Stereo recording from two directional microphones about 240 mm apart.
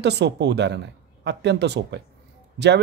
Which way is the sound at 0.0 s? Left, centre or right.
Right.